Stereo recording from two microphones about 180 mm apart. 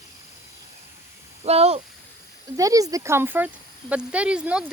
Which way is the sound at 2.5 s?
20° right (ahead or behind).